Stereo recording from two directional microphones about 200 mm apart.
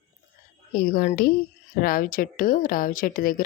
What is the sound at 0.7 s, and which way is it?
A woman's voice, 45° left (ahead or behind).